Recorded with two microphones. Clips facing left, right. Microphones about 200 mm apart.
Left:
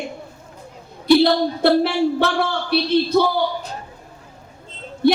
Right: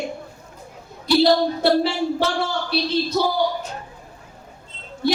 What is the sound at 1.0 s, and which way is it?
Speech, 55° left (ahead or behind).